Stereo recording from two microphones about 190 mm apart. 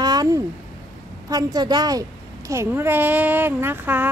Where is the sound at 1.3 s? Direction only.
20° right (ahead or behind).